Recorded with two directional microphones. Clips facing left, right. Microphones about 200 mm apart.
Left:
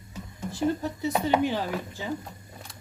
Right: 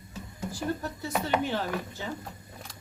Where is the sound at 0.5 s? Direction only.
20° left (ahead or behind).